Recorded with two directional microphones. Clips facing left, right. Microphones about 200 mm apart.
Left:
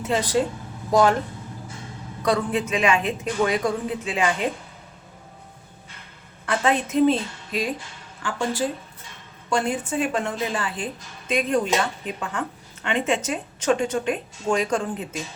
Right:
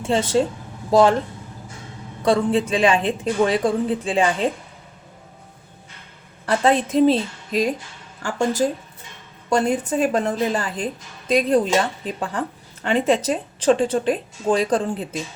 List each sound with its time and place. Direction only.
0.0 s a woman's voice: 25° right (ahead or behind)
2.2 s a woman's voice: 30° right (ahead or behind)
6.4 s a woman's voice: 35° right (ahead or behind)
9.5 s a woman's voice: 40° right (ahead or behind)